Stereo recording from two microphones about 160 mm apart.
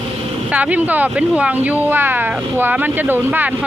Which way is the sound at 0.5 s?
10° right (ahead or behind).